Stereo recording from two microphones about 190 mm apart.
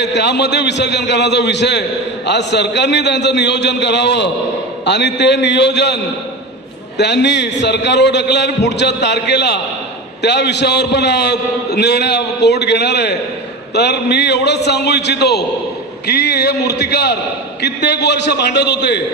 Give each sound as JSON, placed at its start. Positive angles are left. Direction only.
{"t": 0.0, "sound": "a man's voice", "side_deg": 65}
{"t": 7.0, "sound": "a man's voice", "side_deg": 65}